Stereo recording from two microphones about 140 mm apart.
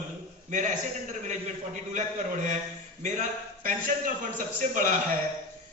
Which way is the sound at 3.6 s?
75° right (ahead or behind).